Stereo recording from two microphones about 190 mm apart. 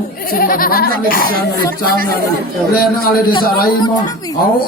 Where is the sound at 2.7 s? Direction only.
50° left (ahead or behind).